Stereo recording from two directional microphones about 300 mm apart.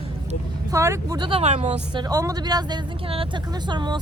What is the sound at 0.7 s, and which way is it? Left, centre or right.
Speech, centre.